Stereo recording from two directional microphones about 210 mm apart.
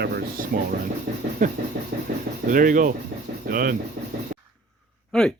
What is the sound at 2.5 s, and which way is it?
Speech, 40° right (ahead or behind).